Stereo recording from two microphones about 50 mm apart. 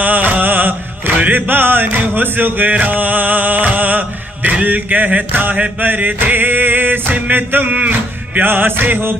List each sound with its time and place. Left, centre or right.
0.0 s music: right